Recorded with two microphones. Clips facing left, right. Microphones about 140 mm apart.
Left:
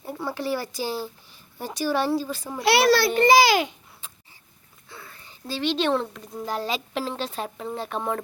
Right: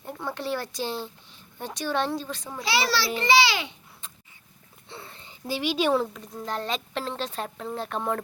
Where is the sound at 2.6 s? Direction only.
60° left (ahead or behind); by 3.7 s 45° left (ahead or behind).